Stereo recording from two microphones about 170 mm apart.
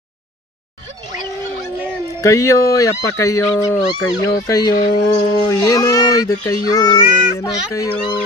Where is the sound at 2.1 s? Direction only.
20° left (ahead or behind).